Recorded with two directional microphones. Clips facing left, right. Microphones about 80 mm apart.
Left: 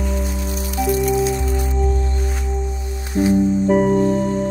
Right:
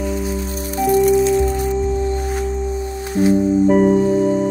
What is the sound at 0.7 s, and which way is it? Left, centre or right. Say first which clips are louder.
Music: right 5 dB; right.